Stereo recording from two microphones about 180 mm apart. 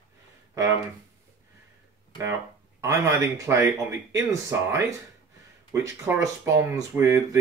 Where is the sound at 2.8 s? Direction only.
15° right (ahead or behind).